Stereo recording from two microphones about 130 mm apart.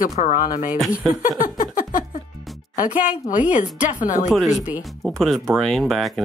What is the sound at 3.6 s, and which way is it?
Speech, 85° left.